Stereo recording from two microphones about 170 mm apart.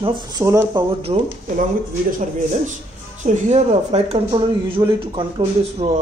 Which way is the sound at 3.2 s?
45° right (ahead or behind).